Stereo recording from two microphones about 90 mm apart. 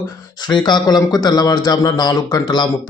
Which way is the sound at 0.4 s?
55° left (ahead or behind).